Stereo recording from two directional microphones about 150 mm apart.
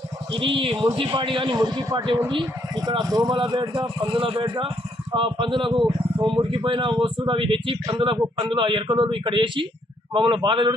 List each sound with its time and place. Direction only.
0.3 s a man's voice: 35° right (ahead or behind)